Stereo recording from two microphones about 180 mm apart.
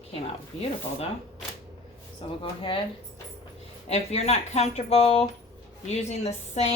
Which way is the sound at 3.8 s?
35° left (ahead or behind).